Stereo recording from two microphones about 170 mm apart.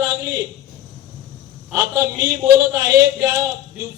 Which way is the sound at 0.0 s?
20° right (ahead or behind).